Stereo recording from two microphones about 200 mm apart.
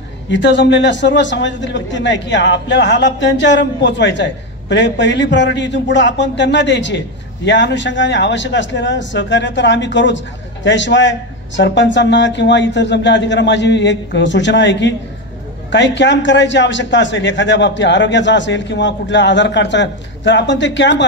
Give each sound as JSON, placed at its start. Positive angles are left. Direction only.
{"t": 0.3, "sound": "a man's voice", "side_deg": 65}